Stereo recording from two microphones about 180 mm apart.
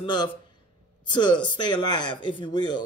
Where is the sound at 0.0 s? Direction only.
25° left (ahead or behind).